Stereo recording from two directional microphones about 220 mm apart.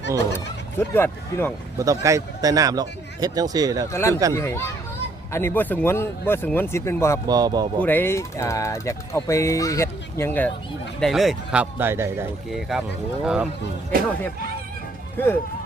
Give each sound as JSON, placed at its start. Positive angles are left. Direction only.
{"t": 0.3, "sound": "speech", "side_deg": 10}
{"t": 1.8, "sound": "speech", "side_deg": -15}
{"t": 3.9, "sound": "speech", "side_deg": 10}
{"t": 7.3, "sound": "speech", "side_deg": -15}
{"t": 7.8, "sound": "speech", "side_deg": 10}
{"t": 12.5, "sound": "speech", "side_deg": 0}